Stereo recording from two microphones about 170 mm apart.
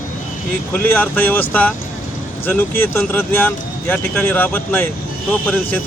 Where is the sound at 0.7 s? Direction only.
10° left (ahead or behind).